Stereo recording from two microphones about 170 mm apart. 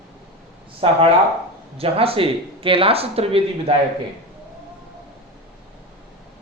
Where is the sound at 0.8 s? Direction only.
35° right (ahead or behind).